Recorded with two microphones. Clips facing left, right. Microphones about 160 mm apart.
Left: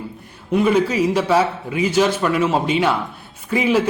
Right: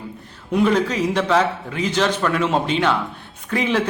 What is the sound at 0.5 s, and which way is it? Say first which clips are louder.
A man's voice: left 2 dB; 5° left (ahead or behind).